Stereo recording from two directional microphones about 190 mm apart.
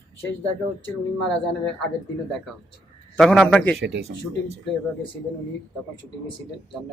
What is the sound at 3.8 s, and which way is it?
Speech, 60° right (ahead or behind).